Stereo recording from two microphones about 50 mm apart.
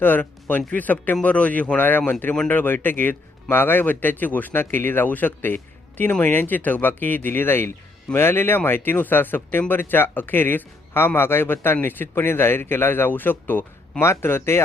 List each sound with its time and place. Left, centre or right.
0.0 s speech: left
14.0 s speech: left